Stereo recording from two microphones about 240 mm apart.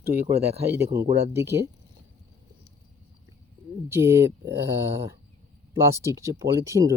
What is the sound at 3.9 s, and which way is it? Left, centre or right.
Speech, centre.